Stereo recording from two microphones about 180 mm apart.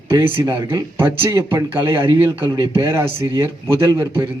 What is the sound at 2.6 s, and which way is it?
Speech, 25° right (ahead or behind).